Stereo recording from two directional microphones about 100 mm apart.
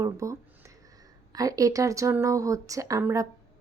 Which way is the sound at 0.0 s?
30° right (ahead or behind).